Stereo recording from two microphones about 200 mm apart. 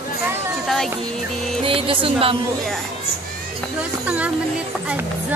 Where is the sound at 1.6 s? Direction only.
25° right (ahead or behind).